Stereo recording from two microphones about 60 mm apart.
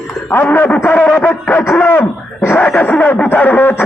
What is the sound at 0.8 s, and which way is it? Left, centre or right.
A man's voice, left.